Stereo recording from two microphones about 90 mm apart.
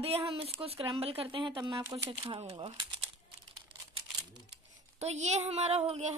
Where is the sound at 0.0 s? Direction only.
90° right; by 1.6 s 70° right (ahead or behind).